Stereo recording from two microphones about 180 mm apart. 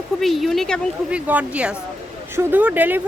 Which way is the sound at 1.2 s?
10° right (ahead or behind).